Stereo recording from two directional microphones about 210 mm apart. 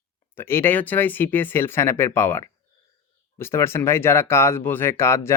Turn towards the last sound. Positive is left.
turn(degrees=15)  # may be behind; listen again after turning